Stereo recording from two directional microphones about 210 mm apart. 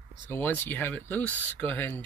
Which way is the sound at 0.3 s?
10° left (ahead or behind).